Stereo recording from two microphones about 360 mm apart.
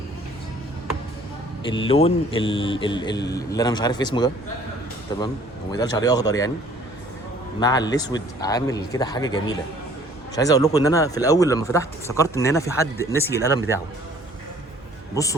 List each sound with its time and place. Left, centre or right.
1.9 s a man's voice: centre
5.7 s a man's voice: centre
7.6 s a man's voice: centre
15.1 s a man's voice: centre